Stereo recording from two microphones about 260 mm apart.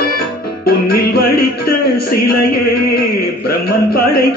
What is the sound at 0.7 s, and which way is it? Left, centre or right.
Music, left.